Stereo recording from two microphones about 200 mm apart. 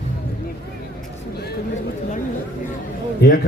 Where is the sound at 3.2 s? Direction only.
55° left (ahead or behind).